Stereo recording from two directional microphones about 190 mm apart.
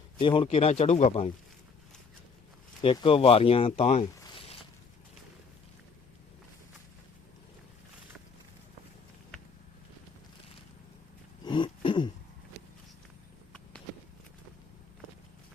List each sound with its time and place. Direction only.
0.2 s a man's voice: 25° left (ahead or behind)
2.8 s speech: 25° left (ahead or behind)
4.4 s zipper: 30° left (ahead or behind)
11.4 s throat clearing: 25° left (ahead or behind)